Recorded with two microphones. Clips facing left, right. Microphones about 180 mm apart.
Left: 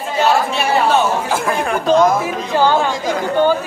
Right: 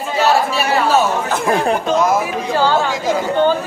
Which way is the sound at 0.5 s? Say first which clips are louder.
Even; 5° right (ahead or behind).